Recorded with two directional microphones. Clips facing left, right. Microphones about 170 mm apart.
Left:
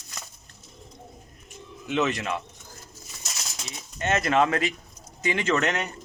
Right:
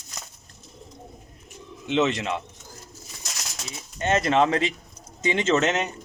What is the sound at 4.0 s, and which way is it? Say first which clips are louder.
Speech: right 2 dB; 30° right (ahead or behind).